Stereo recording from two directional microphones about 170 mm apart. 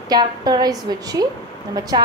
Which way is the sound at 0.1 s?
25° right (ahead or behind).